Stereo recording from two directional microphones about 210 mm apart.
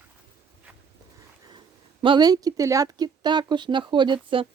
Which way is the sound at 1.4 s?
20° right (ahead or behind).